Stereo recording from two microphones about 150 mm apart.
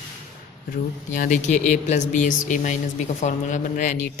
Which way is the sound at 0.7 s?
60° left (ahead or behind).